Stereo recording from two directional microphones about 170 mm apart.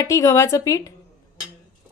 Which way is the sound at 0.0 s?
20° left (ahead or behind).